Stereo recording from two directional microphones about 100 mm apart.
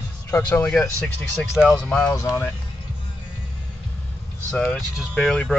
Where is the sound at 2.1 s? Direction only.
25° left (ahead or behind).